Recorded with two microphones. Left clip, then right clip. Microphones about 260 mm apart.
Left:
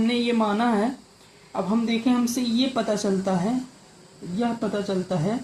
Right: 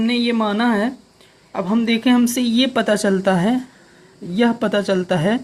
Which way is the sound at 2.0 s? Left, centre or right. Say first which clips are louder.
Right 7 dB; right.